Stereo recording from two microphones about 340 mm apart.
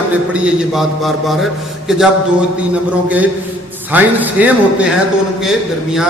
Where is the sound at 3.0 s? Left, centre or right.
Centre.